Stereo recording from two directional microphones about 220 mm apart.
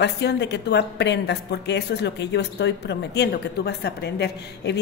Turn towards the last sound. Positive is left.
turn(degrees=50)  # may be behind; listen again after turning